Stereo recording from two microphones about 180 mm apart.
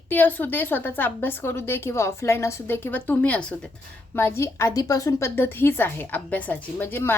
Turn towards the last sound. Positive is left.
turn(degrees=10)  # may be behind; listen again after turning